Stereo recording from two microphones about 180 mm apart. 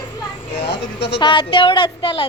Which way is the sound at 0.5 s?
70° left (ahead or behind).